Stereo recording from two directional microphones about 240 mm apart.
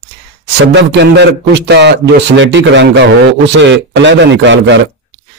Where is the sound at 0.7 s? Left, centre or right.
Right.